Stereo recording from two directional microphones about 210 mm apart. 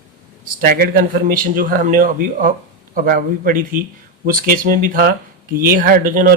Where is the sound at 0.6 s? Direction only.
45° right (ahead or behind).